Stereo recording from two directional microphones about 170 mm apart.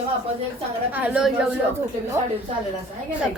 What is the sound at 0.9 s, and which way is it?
Speech, 10° right (ahead or behind).